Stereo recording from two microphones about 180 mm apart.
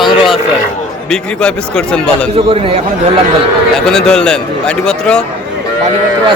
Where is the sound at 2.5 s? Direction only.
35° right (ahead or behind).